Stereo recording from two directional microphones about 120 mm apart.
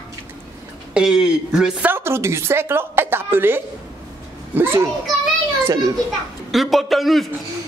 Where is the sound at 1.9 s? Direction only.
20° right (ahead or behind).